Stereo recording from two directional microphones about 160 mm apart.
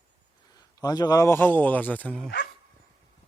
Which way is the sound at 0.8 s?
25° left (ahead or behind).